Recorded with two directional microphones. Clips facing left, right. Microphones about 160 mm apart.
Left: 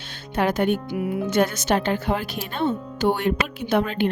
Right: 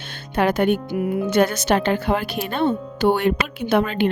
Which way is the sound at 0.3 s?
70° right (ahead or behind).